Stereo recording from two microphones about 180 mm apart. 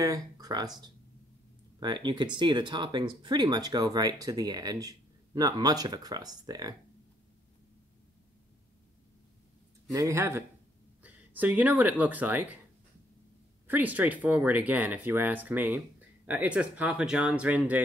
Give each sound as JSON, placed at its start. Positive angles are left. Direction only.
{"t": 0.0, "sound": "speech", "side_deg": -20}
{"t": 1.8, "sound": "speech", "side_deg": -25}
{"t": 9.8, "sound": "speech", "side_deg": -20}
{"t": 13.7, "sound": "speech", "side_deg": -10}